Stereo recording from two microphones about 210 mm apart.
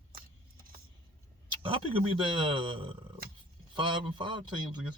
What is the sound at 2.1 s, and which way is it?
Speech, 25° right (ahead or behind).